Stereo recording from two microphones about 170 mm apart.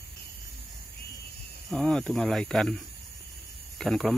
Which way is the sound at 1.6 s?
5° left (ahead or behind).